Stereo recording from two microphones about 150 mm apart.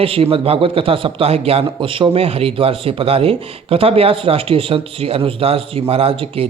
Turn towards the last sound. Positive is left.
turn(degrees=-40)  # may be behind; listen again after turning